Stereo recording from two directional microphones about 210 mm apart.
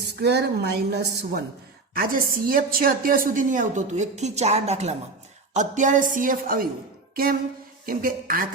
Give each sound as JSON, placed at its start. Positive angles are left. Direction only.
{"t": 0.2, "sound": "a woman's voice", "side_deg": -50}